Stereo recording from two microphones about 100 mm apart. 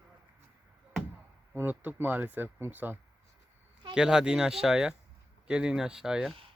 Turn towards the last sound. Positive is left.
turn(degrees=-5)  # may be behind; listen again after turning